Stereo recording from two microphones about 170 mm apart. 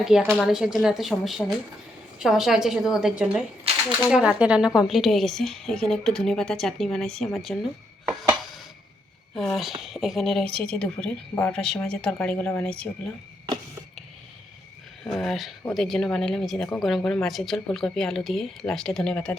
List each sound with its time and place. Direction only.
0.0 s speech: 5° right (ahead or behind)
3.7 s a sound: 35° right (ahead or behind)
4.1 s speech: 5° right (ahead or behind)
9.6 s speech: centre (ahead or behind)
15.0 s speech: centre (ahead or behind)